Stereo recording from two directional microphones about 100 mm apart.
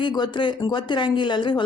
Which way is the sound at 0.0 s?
50° left (ahead or behind).